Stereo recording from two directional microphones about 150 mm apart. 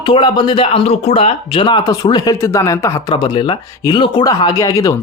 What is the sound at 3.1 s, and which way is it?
Speech, 35° left (ahead or behind).